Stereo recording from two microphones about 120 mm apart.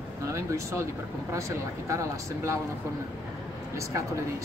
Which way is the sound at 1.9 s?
25° right (ahead or behind).